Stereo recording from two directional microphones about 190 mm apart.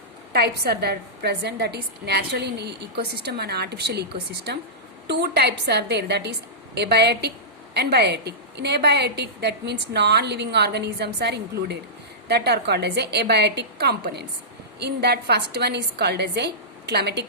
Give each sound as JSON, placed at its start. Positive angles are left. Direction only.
{"t": 0.3, "sound": "a woman's voice", "side_deg": -60}
{"t": 5.0, "sound": "a woman's voice", "side_deg": -60}